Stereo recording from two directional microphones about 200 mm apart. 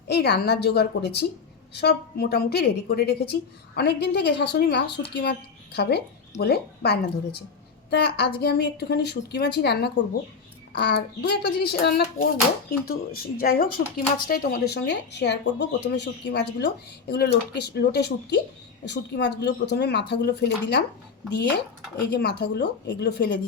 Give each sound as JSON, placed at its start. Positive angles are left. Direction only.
{"t": 0.1, "sound": "speech", "side_deg": 55}
{"t": 22.1, "sound": "speech", "side_deg": 55}